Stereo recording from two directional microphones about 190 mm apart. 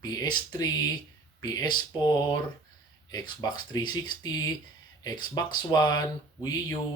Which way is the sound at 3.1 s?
20° left (ahead or behind).